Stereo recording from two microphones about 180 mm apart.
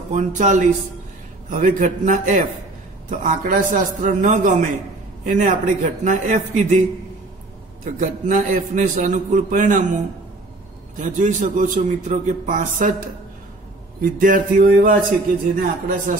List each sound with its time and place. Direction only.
0.1 s a man's voice: 45° right (ahead or behind)
7.8 s a man's voice: 45° right (ahead or behind)
11.0 s a man's voice: 45° right (ahead or behind)
14.1 s a man's voice: 50° right (ahead or behind)